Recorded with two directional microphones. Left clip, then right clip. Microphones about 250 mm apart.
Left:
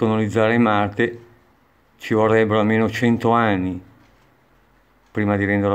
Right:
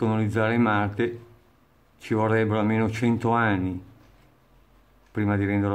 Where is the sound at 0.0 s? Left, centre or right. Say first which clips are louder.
Left 6 dB; centre.